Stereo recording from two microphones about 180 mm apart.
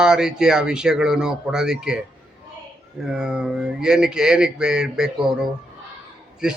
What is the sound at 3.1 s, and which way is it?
Speech, 5° right (ahead or behind).